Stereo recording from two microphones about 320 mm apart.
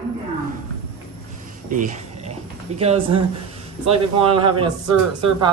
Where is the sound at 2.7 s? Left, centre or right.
Centre.